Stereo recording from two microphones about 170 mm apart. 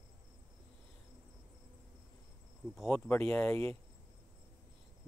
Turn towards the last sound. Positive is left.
turn(degrees=10)  # may be behind; listen again after turning